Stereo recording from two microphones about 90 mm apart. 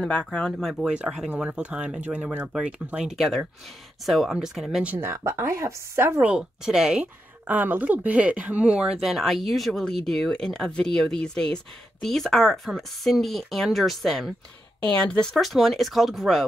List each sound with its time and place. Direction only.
0.0 s speech: 10° left (ahead or behind)
0.5 s speech: centre (ahead or behind)
0.8 s speech: 10° right (ahead or behind)
4.8 s speech: 25° right (ahead or behind)
6.2 s speech: 10° right (ahead or behind)
14.8 s speech: 10° left (ahead or behind)